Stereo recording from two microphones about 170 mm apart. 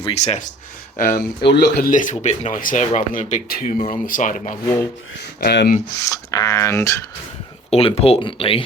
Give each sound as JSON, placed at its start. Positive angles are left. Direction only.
{"t": 0.0, "sound": "speech", "side_deg": 40}
{"t": 0.9, "sound": "speech", "side_deg": 50}
{"t": 1.5, "sound": "speech", "side_deg": 70}
{"t": 5.4, "sound": "speech", "side_deg": 65}
{"t": 6.0, "sound": "speech", "side_deg": 20}
{"t": 7.7, "sound": "speech", "side_deg": 35}